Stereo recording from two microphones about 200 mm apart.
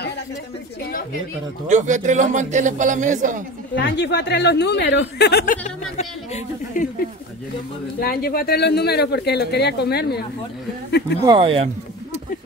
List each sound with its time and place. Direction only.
1.7 s a man's voice: 35° right (ahead or behind)
3.7 s speech: 60° left (ahead or behind)
5.4 s speech: 40° left (ahead or behind)
8.0 s speech: 50° left (ahead or behind)
11.2 s speech: 25° right (ahead or behind)